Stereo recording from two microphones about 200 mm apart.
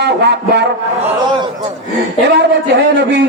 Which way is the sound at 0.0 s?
55° right (ahead or behind).